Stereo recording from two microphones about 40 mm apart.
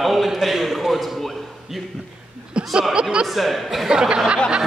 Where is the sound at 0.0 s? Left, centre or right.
Centre.